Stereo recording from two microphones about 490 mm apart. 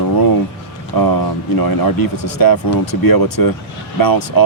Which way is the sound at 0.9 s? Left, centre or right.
Left.